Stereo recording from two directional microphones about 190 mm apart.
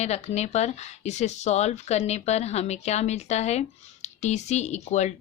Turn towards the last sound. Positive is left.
turn(degrees=35)  # may be behind; listen again after turning